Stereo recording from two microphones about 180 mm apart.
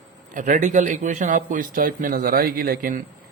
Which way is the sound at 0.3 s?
45° right (ahead or behind).